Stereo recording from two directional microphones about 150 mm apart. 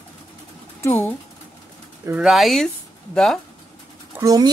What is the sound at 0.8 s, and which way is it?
Speech, 15° left (ahead or behind).